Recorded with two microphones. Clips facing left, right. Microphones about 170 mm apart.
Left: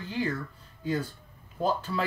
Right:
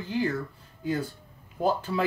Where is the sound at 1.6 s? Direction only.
10° right (ahead or behind).